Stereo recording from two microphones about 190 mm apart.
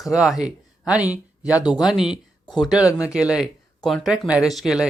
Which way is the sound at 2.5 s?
25° left (ahead or behind).